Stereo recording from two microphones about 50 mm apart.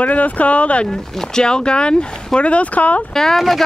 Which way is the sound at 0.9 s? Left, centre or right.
Centre.